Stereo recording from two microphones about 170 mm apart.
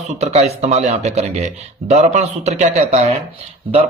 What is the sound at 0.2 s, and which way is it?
Speech, 40° right (ahead or behind).